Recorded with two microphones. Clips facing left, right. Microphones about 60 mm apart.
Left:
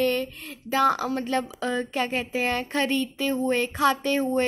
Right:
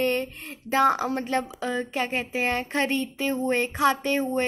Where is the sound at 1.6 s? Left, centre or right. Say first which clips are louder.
Left 1 dB; centre.